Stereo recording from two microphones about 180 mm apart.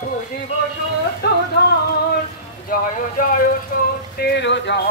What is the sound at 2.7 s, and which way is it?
Speech, 50° left (ahead or behind).